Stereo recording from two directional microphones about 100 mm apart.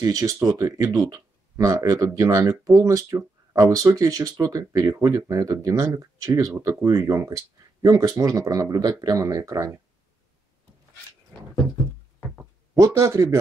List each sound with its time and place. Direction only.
0.0 s speech: 35° right (ahead or behind)
12.7 s speech: 30° right (ahead or behind)